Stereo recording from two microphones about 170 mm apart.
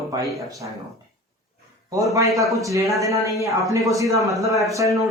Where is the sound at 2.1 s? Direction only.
20° right (ahead or behind).